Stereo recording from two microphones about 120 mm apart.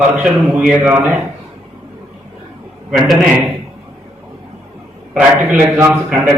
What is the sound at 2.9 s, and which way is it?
Speech, centre (ahead or behind).